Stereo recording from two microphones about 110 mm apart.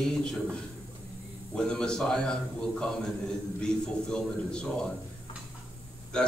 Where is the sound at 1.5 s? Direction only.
10° left (ahead or behind).